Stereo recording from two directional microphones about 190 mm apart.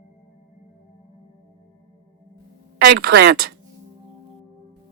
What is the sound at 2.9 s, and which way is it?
Speech, 65° right (ahead or behind).